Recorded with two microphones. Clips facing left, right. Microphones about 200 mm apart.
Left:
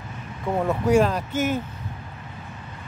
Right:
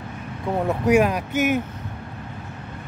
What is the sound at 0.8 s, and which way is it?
Speech, 15° right (ahead or behind).